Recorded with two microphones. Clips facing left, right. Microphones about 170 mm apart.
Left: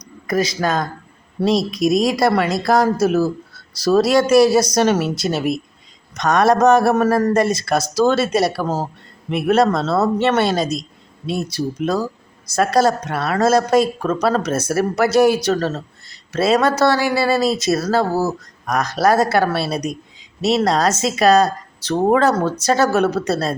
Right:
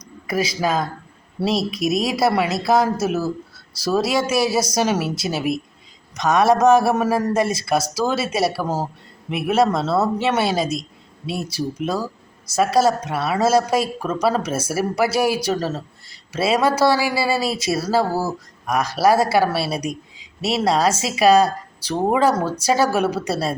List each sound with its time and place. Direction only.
0.3 s speech: 5° right (ahead or behind)
18.1 s speech: 20° left (ahead or behind)
18.6 s speech: 10° right (ahead or behind)